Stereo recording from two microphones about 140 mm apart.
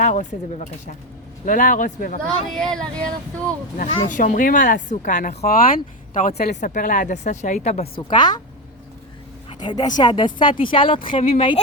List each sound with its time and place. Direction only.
0.0 s speech: 55° left (ahead or behind)
1.5 s speech: 70° left (ahead or behind)
2.2 s speech: 5° left (ahead or behind)
3.8 s speech: 65° left (ahead or behind)
5.5 s speech: 85° left; by 7.9 s 55° left (ahead or behind)
7.9 s a woman's voice: 30° left (ahead or behind)
9.5 s a woman's voice: 30° left (ahead or behind)